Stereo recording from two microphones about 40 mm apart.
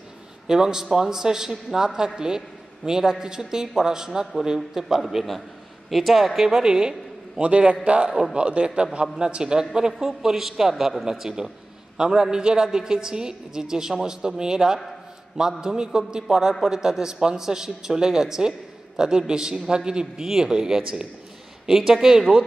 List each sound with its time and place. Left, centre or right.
0.5 s a man's voice: centre
5.0 s a man's voice: centre
7.4 s a man's voice: right
8.1 s a man's voice: centre
8.4 s a man's voice: right; by 22.2 s centre